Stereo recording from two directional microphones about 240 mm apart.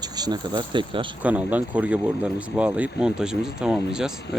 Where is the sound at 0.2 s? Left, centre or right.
Centre.